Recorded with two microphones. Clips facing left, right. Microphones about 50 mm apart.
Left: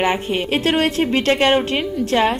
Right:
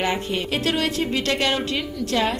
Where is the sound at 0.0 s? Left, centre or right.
Left.